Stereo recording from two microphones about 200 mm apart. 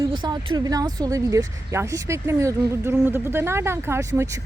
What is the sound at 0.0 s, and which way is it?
Speech, 20° right (ahead or behind).